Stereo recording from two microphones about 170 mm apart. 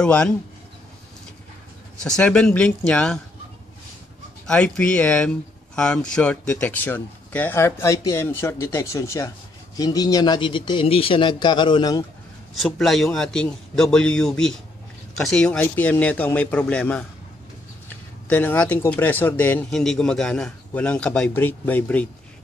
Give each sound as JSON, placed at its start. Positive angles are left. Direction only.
{"t": 0.0, "sound": "a man's voice", "side_deg": 5}
{"t": 2.0, "sound": "a man's voice", "side_deg": 5}
{"t": 4.5, "sound": "a man's voice", "side_deg": 5}
{"t": 12.5, "sound": "a man's voice", "side_deg": 0}
{"t": 18.3, "sound": "speech", "side_deg": 10}